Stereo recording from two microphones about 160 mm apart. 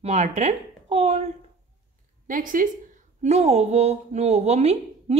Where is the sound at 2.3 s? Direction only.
60° right (ahead or behind).